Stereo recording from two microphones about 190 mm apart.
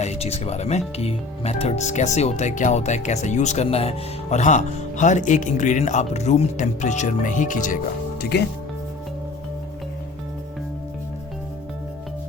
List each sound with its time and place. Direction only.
0.0 s speech: 35° left (ahead or behind)
8.2 s speech: 60° left (ahead or behind)